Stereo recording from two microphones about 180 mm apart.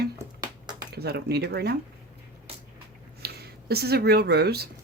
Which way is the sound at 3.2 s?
60° right (ahead or behind).